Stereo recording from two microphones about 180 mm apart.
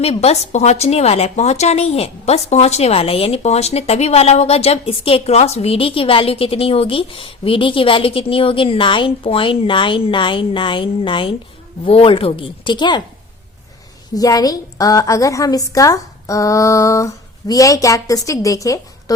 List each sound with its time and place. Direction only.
0.0 s a woman's voice: 35° left (ahead or behind)
14.2 s a woman's voice: 20° left (ahead or behind)